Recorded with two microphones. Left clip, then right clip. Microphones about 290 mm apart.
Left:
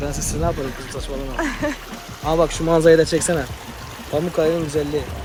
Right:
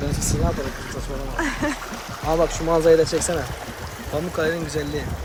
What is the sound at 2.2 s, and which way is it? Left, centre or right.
Speech, left.